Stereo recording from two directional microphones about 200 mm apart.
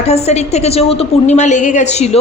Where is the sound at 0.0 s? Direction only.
35° left (ahead or behind).